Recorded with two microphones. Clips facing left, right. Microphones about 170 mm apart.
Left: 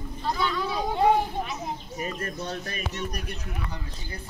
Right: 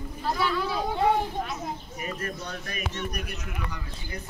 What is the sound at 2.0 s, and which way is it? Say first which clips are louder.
Speech: left 3 dB; 30° left (ahead or behind).